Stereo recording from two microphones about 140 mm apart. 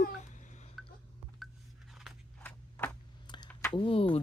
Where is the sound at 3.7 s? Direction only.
40° left (ahead or behind).